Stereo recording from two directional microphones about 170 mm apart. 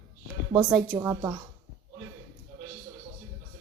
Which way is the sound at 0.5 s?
5° right (ahead or behind).